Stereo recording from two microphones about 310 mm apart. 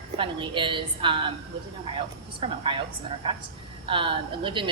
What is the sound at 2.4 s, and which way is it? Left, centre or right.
Speech, centre.